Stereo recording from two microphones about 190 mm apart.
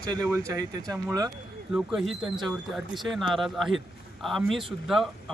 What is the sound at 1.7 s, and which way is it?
Speech, centre (ahead or behind).